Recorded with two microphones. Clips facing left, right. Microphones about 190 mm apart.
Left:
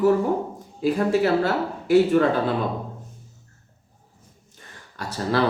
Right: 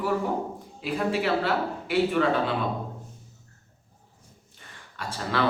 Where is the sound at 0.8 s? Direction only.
40° left (ahead or behind).